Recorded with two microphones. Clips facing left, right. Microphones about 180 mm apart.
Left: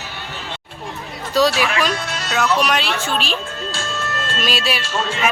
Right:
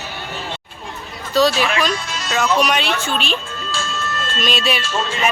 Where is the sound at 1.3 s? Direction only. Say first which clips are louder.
Right 1 dB; 10° left (ahead or behind).